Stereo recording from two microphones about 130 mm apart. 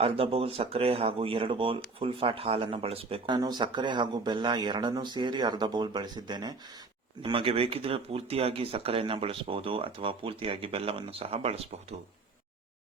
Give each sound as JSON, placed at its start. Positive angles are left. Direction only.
{"t": 0.0, "sound": "speech", "side_deg": -45}
{"t": 3.3, "sound": "speech", "side_deg": -30}